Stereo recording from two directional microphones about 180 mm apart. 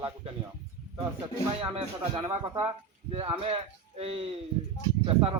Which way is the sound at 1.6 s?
30° right (ahead or behind).